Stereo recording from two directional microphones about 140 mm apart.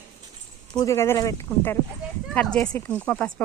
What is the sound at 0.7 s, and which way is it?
Speech, 25° left (ahead or behind).